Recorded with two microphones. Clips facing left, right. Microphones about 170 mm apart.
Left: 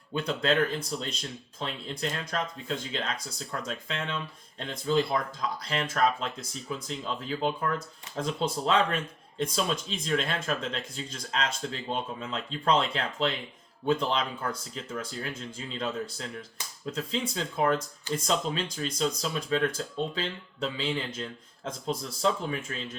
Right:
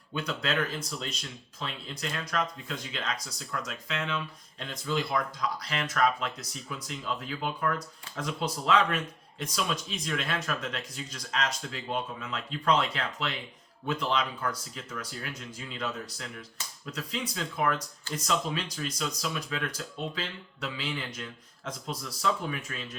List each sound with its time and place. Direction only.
0.1 s speech: 30° left (ahead or behind)